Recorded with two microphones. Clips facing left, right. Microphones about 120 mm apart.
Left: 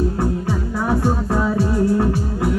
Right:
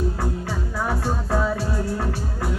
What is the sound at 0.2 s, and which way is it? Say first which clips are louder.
Music: left 6 dB; 20° left (ahead or behind).